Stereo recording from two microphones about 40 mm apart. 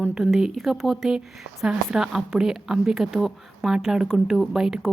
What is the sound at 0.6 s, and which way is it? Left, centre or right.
Speech, centre.